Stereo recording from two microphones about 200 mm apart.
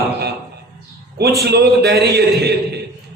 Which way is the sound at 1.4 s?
55° right (ahead or behind).